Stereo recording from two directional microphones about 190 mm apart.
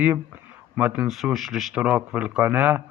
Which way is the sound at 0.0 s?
5° right (ahead or behind).